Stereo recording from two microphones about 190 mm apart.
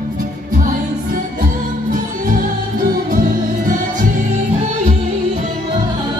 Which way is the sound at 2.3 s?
45° right (ahead or behind).